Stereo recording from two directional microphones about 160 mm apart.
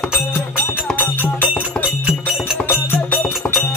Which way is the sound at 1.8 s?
5° right (ahead or behind).